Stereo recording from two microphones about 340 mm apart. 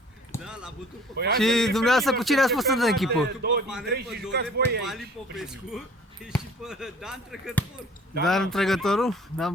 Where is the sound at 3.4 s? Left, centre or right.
Right.